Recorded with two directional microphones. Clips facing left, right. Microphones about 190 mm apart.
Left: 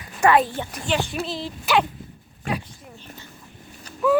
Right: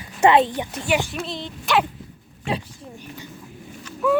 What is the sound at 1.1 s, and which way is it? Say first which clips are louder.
Speech: left 2 dB; centre (ahead or behind).